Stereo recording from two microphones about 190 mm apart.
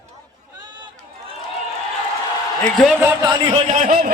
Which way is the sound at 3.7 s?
40° right (ahead or behind).